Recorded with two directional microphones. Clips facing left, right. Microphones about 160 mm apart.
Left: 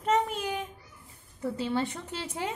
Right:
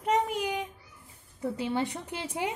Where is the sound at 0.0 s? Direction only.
15° right (ahead or behind).